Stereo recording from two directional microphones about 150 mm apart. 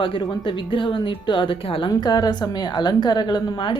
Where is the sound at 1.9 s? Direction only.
25° left (ahead or behind).